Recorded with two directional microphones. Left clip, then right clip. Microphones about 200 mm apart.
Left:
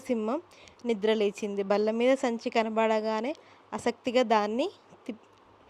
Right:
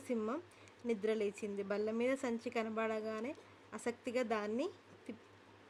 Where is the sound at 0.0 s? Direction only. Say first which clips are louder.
Left 9 dB; 30° left (ahead or behind).